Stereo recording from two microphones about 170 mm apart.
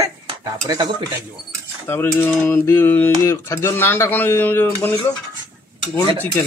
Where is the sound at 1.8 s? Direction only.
10° left (ahead or behind).